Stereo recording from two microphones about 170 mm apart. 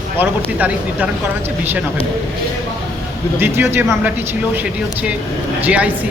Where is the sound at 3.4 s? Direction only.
15° right (ahead or behind).